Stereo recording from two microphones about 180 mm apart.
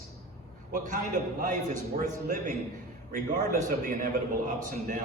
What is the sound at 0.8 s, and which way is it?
A man's voice, 45° right (ahead or behind).